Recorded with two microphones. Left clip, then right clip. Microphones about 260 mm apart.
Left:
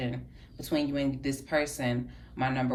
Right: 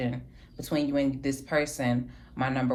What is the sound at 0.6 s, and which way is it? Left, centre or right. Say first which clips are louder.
Speech: right 2 dB; centre.